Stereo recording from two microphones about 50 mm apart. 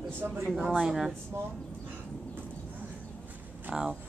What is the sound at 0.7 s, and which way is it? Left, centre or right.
Speech, centre.